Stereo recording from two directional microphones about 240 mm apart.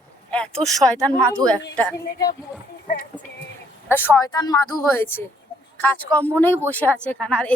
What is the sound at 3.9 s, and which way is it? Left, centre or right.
Speech, centre.